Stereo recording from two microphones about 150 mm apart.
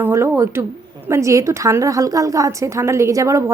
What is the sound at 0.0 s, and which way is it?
A woman's voice, 15° right (ahead or behind).